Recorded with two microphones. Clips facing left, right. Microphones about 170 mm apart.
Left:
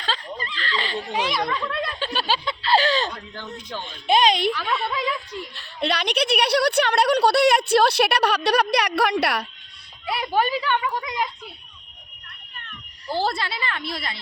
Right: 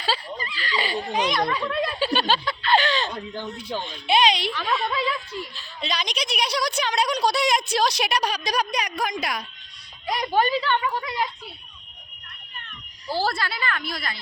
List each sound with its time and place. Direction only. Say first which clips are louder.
0.0 s snicker: right 1 dB; 10° right (ahead or behind)
1.1 s speech: right 1 dB; 5° left (ahead or behind)
1.5 s speech: right 2 dB; 10° right (ahead or behind)
2.1 s speech: right 1 dB; 10° left (ahead or behind)
2.4 s a sound: left 1 dB; 25° left (ahead or behind)
3.2 s speech: right 4 dB; 15° right (ahead or behind)
4.0 s speech: left 3 dB; 45° left (ahead or behind)
4.5 s speech: even; centre (ahead or behind)
4.9 s speech: even; 15° left (ahead or behind)
5.5 s a woman's voice: left 7 dB; 65° left (ahead or behind)
10.1 s speech: right 1 dB; 10° left (ahead or behind)
13.1 s a woman's voice: left 1 dB; 20° left (ahead or behind)